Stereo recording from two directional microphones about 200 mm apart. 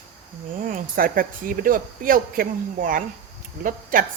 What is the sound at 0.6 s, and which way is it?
A woman's voice, 45° right (ahead or behind).